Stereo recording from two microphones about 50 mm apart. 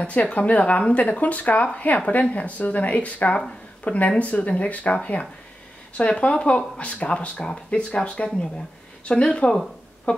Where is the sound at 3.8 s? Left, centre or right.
Left.